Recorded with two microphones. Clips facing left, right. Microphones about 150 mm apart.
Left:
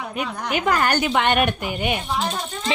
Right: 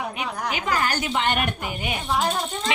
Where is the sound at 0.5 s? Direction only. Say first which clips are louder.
Left 6 dB; 55° left (ahead or behind).